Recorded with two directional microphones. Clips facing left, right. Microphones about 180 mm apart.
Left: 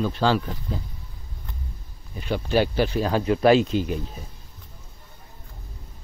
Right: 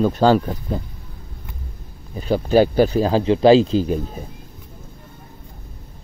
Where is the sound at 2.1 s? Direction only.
35° right (ahead or behind).